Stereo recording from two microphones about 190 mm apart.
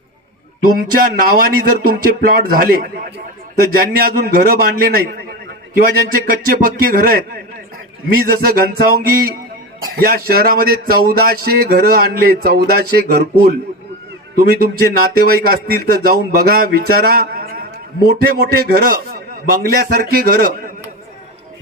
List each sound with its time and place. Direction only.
1.4 s speech: 50° right (ahead or behind)